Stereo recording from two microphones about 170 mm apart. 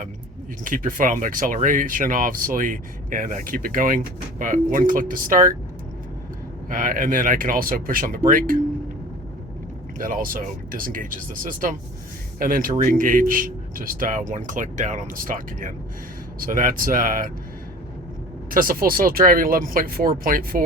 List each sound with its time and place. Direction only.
0.6 s speech: 55° right (ahead or behind)
6.7 s speech: 55° right (ahead or behind)
10.0 s speech: 55° right (ahead or behind)
18.5 s speech: 55° right (ahead or behind)